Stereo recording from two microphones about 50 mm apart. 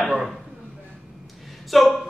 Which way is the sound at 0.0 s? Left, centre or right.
Centre.